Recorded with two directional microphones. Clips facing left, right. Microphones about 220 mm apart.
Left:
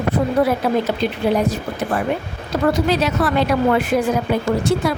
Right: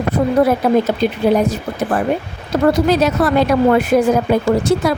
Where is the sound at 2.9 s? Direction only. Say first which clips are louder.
Right 4 dB; 45° right (ahead or behind).